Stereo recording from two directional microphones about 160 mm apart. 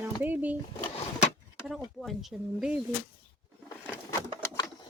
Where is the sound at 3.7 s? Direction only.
15° left (ahead or behind).